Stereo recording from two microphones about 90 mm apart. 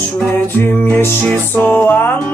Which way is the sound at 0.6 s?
25° left (ahead or behind).